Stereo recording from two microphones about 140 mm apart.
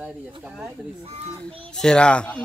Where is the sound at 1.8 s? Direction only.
5° left (ahead or behind).